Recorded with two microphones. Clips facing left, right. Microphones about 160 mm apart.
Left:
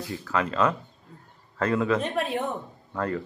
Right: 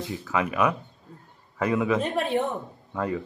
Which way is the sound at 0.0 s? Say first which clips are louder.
Right 1 dB; 15° right (ahead or behind).